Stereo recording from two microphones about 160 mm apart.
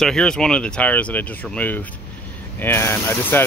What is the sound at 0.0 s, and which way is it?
Speech, 5° left (ahead or behind).